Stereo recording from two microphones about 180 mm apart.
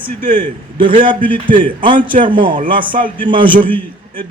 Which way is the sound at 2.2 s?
25° right (ahead or behind).